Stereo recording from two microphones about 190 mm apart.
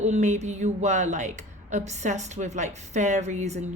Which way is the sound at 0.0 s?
40° right (ahead or behind).